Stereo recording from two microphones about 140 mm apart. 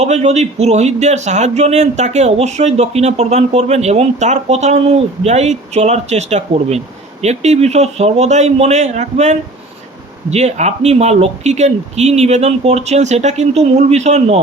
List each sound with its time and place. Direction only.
0.0 s speech: 50° right (ahead or behind)